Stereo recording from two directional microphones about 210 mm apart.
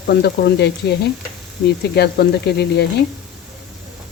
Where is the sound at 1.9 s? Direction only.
50° left (ahead or behind).